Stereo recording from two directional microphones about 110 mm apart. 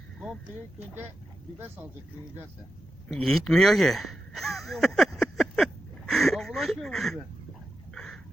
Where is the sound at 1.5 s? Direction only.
20° right (ahead or behind).